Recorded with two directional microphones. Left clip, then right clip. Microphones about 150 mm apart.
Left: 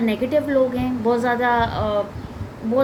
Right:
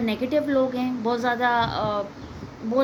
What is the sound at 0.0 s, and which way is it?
A woman's voice, 40° right (ahead or behind).